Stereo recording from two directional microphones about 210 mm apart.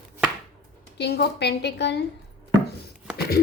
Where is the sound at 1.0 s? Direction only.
50° left (ahead or behind).